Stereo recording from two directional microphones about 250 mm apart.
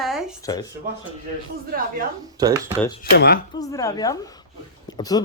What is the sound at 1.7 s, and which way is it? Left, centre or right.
Speech, right.